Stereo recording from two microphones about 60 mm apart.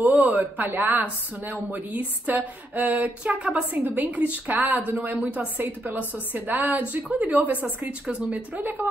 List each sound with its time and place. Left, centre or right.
0.0 s a woman's voice: right